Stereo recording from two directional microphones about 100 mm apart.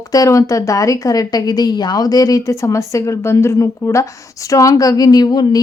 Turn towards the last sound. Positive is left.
turn(degrees=40)  # may be behind; listen again after turning